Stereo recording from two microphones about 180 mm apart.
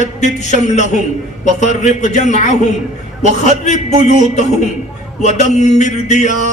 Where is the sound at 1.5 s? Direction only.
40° left (ahead or behind).